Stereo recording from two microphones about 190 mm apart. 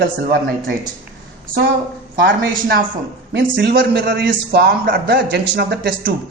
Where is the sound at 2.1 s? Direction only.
55° right (ahead or behind).